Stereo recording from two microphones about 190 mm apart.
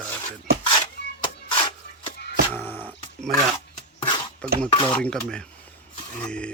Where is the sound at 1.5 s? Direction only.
25° left (ahead or behind).